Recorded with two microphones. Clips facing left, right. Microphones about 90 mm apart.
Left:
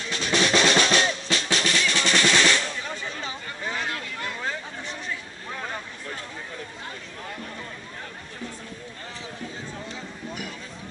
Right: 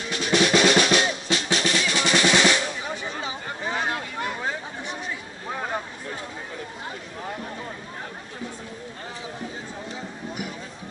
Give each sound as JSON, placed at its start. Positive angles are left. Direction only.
{"t": 0.0, "sound": "drum", "side_deg": -15}
{"t": 0.7, "sound": "drum", "side_deg": 30}
{"t": 1.3, "sound": "drum", "side_deg": -20}
{"t": 3.4, "sound": "a sound", "side_deg": -25}
{"t": 5.5, "sound": "vehicle", "side_deg": -25}